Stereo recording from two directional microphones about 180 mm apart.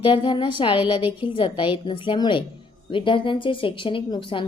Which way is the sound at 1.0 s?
10° right (ahead or behind).